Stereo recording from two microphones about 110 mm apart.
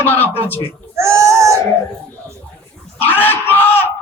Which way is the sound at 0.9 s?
25° right (ahead or behind).